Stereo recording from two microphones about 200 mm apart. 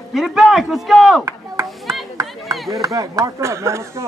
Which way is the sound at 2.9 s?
15° right (ahead or behind).